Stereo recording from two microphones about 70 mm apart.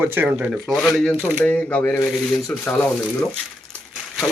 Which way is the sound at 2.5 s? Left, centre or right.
Left.